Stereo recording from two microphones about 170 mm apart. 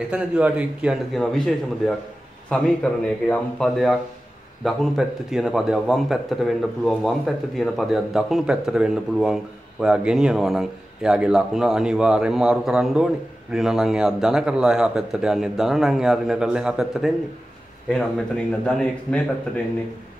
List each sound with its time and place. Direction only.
0.1 s a man's voice: 5° right (ahead or behind)